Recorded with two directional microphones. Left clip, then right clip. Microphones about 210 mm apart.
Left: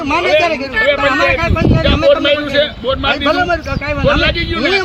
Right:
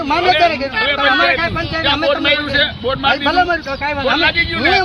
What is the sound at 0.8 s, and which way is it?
A man's voice, 10° right (ahead or behind).